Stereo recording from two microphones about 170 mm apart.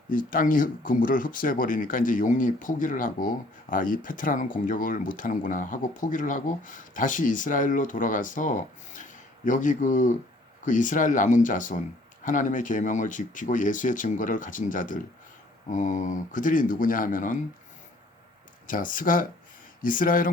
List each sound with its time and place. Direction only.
0.1 s speech: 55° left (ahead or behind)
18.7 s speech: 55° left (ahead or behind)